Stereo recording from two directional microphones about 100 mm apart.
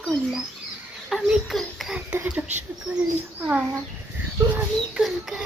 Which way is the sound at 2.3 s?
15° right (ahead or behind).